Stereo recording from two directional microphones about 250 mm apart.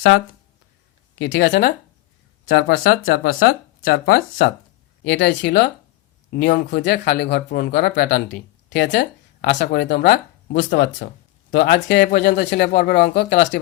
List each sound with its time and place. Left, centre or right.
1.1 s speech: left